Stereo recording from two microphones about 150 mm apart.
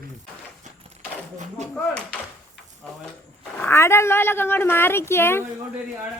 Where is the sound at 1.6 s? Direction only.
50° right (ahead or behind).